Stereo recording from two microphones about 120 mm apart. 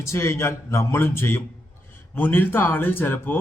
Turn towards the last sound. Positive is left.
turn(degrees=15)  # may be behind; listen again after turning